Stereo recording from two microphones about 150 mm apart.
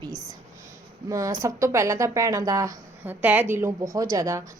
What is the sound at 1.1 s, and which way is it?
A woman's voice, 20° right (ahead or behind).